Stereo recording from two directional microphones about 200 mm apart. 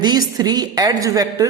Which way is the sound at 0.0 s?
20° right (ahead or behind).